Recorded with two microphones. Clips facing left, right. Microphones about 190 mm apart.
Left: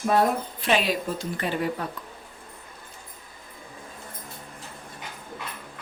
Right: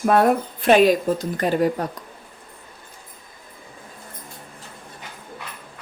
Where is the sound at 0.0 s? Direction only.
60° right (ahead or behind); by 1.9 s 40° right (ahead or behind).